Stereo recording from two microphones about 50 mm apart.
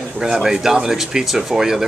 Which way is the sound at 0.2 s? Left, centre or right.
Centre.